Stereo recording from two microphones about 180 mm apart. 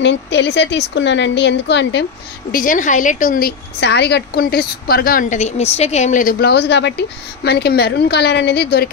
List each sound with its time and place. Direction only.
0.0 s a woman's voice: 75° left (ahead or behind)
2.5 s a woman's voice: 45° left (ahead or behind)
6.4 s a woman's voice: 70° left (ahead or behind)